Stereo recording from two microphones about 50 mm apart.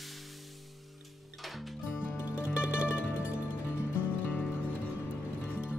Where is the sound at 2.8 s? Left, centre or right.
Right.